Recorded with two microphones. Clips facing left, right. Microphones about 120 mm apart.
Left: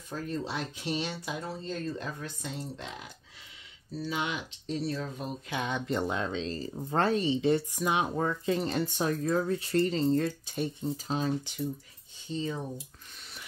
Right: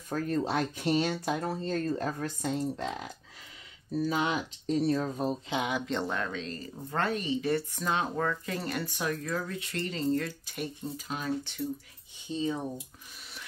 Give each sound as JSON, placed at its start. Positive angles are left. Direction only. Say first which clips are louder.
{"t": 0.1, "sound": "speech", "louder": "right 5 dB", "side_deg": -50}
{"t": 5.9, "sound": "speech", "louder": "left 2 dB", "side_deg": 10}
{"t": 6.1, "sound": "speech", "louder": "left 2 dB", "side_deg": 25}
{"t": 7.7, "sound": "speech", "louder": "left 2 dB", "side_deg": 15}
{"t": 12.3, "sound": "speech", "louder": "right 2 dB", "side_deg": -15}